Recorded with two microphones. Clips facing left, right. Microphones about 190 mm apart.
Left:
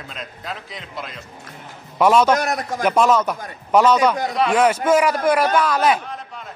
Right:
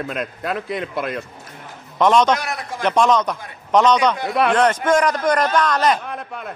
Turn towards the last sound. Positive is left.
turn(degrees=5)  # may be behind; listen again after turning